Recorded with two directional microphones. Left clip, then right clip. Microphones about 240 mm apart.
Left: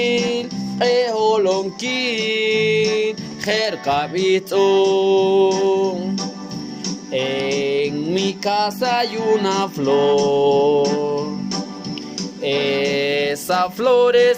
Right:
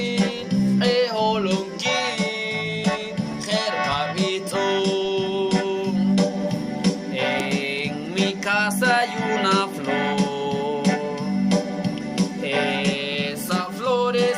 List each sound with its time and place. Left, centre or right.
0.0 s music: left
7.1 s music: left
12.5 s music: centre; by 14.3 s left